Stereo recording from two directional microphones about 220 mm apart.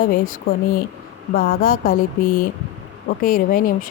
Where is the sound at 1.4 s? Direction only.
40° left (ahead or behind).